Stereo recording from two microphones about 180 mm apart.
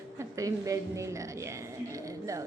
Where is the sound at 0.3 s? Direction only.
20° right (ahead or behind).